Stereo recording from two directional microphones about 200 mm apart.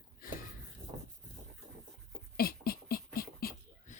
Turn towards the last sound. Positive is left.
turn(degrees=50)  # may be behind; listen again after turning